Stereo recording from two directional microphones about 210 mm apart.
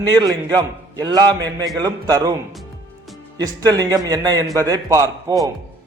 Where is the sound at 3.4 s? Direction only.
20° right (ahead or behind).